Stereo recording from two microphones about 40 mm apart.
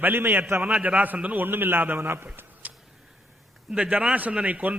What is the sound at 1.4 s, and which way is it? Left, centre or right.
Speech, right.